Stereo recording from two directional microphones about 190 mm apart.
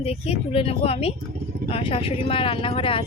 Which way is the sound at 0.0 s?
30° left (ahead or behind).